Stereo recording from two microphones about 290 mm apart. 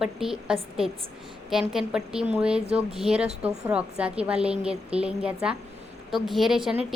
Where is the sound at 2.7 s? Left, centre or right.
Centre.